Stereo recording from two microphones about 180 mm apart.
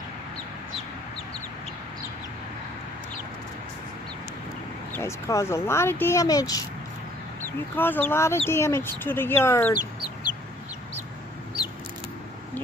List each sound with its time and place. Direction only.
4.9 s speech: 15° left (ahead or behind)
7.7 s speech: 10° left (ahead or behind)